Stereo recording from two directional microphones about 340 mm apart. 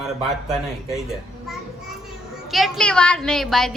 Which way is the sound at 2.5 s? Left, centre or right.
Centre.